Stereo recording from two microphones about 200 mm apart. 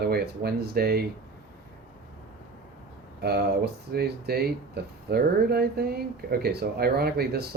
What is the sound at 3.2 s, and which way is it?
Speech, 55° right (ahead or behind).